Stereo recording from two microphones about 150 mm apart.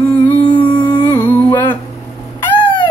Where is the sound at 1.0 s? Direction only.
15° left (ahead or behind).